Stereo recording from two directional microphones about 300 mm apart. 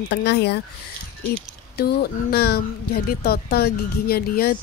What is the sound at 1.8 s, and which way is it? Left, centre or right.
A woman's voice, left.